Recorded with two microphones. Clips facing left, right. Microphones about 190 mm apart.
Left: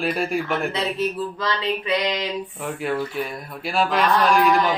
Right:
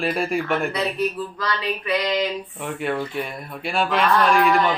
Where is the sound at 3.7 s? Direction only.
Centre (ahead or behind).